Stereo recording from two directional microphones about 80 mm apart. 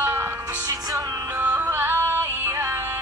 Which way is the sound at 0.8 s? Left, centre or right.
Right.